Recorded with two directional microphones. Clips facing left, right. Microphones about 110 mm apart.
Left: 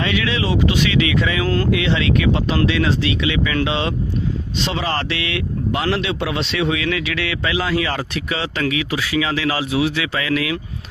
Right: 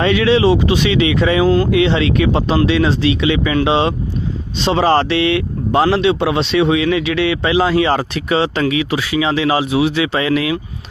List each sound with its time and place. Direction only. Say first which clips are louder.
0.0 s speech: right 9 dB; 35° right (ahead or behind)